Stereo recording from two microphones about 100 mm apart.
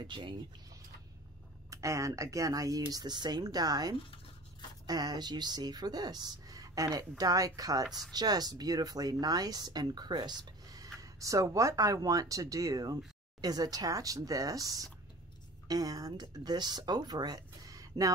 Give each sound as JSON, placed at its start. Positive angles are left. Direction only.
{"t": 0.0, "sound": "speech", "side_deg": -55}
{"t": 1.7, "sound": "speech", "side_deg": -30}